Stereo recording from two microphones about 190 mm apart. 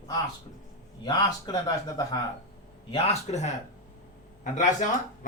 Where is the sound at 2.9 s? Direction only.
35° left (ahead or behind).